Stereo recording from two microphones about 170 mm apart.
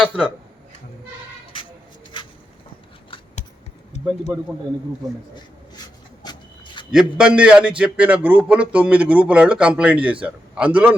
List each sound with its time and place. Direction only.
0.0 s a man's voice: 10° right (ahead or behind)
5.3 s a sound: 25° left (ahead or behind)
6.9 s a man's voice: 5° right (ahead or behind)